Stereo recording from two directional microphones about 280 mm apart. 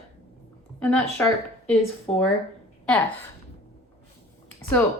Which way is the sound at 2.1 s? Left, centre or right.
Centre.